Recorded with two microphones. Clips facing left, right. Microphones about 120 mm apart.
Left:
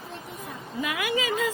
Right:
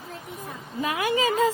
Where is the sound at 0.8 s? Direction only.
35° right (ahead or behind).